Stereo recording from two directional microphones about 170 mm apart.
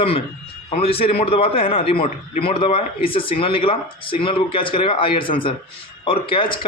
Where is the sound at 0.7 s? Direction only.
35° left (ahead or behind).